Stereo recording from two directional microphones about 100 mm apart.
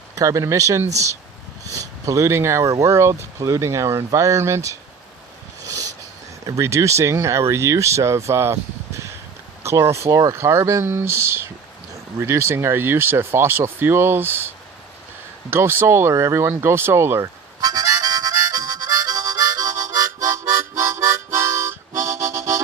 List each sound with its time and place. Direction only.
0.2 s speech: 30° right (ahead or behind)
5.6 s a sound: 35° right (ahead or behind)
6.4 s speech: 30° right (ahead or behind)
17.6 s harmonica: 40° right (ahead or behind)